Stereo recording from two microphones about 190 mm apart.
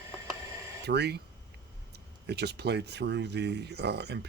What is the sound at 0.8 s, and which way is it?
Speech, 60° right (ahead or behind).